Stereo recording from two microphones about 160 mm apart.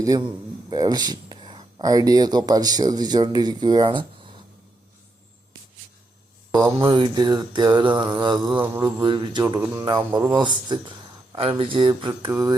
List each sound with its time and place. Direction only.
0.0 s a man's voice: 25° right (ahead or behind)
6.5 s speech: 20° right (ahead or behind)